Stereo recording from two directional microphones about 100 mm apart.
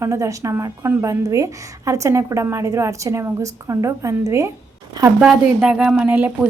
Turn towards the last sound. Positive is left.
turn(degrees=-15)  # may be behind; listen again after turning